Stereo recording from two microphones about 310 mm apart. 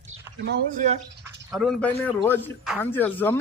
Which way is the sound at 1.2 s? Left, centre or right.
Centre.